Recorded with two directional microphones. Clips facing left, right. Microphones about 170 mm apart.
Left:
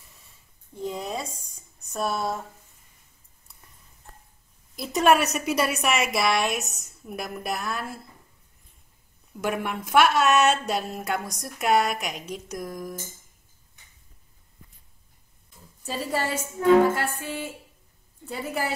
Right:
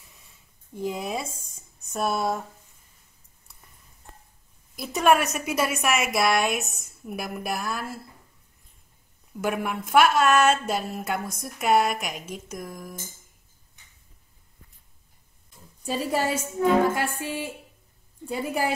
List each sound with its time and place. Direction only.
0.7 s a woman's voice: 10° right (ahead or behind)
4.8 s a woman's voice: centre (ahead or behind)
9.4 s a woman's voice: centre (ahead or behind)
15.8 s a woman's voice: 15° right (ahead or behind)